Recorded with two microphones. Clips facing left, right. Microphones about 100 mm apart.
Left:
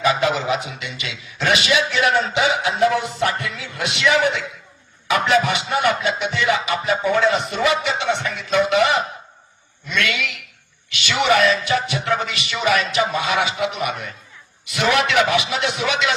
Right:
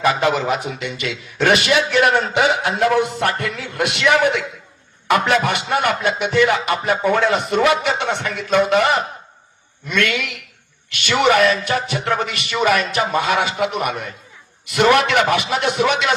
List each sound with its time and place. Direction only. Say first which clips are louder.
0.0 s a man's voice: right 2 dB; 50° right (ahead or behind)